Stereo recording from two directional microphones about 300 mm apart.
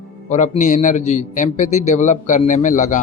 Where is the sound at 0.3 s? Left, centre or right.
Left.